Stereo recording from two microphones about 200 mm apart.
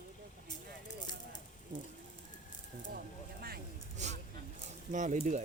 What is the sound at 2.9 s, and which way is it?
Speech, 50° right (ahead or behind).